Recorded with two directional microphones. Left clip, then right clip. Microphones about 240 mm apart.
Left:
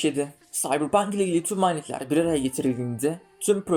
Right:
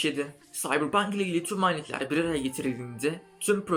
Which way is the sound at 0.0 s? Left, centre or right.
Left.